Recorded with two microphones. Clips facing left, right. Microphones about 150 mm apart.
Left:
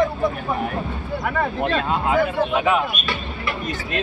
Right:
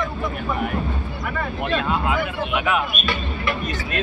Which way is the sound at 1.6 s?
35° left (ahead or behind).